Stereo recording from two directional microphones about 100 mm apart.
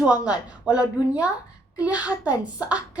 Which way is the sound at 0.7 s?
10° right (ahead or behind).